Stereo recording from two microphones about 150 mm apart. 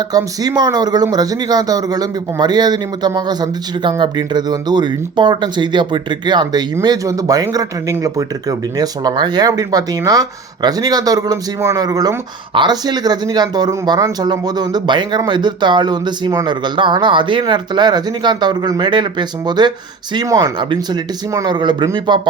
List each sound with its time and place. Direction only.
0.1 s speech: 25° right (ahead or behind)